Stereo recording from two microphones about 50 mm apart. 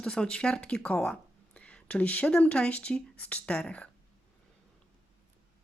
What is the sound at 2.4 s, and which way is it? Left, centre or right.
Speech, left.